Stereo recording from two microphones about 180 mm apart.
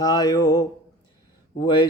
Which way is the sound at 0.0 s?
20° left (ahead or behind).